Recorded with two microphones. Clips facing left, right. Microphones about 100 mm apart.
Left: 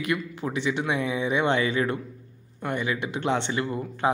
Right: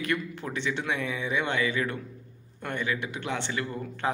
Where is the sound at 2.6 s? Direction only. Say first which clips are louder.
Left 3 dB; 15° left (ahead or behind).